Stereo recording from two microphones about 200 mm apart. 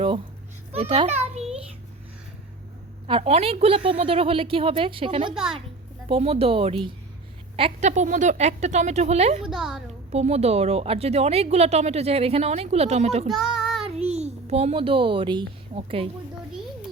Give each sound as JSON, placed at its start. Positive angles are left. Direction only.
{"t": 0.7, "sound": "a child's voice", "side_deg": -30}
{"t": 3.1, "sound": "a woman's voice", "side_deg": -30}
{"t": 5.3, "sound": "a woman's voice", "side_deg": -5}
{"t": 6.1, "sound": "a woman's voice", "side_deg": -30}
{"t": 9.5, "sound": "a woman's voice", "side_deg": 0}
{"t": 10.1, "sound": "speech", "side_deg": -35}
{"t": 13.6, "sound": "child singing", "side_deg": 0}
{"t": 13.8, "sound": "a child's voice", "side_deg": -30}